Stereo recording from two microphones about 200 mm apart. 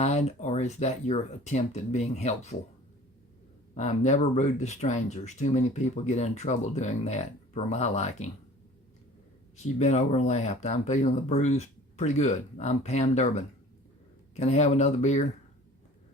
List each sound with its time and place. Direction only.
0.0 s speech: 35° left (ahead or behind)
3.8 s speech: 35° left (ahead or behind)
9.7 s speech: 35° left (ahead or behind)